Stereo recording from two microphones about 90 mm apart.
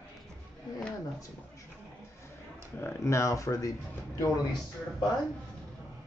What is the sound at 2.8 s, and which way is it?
Speech, 30° left (ahead or behind).